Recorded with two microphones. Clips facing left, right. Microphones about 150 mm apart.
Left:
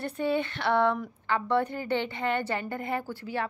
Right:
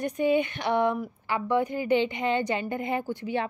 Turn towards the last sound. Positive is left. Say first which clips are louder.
# right 3 dB
turn(degrees=-20)  # may be behind; listen again after turning